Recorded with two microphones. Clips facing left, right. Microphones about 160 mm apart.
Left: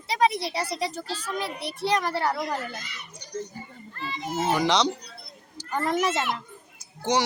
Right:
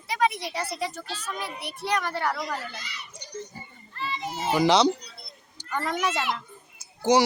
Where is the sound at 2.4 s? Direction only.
50° left (ahead or behind).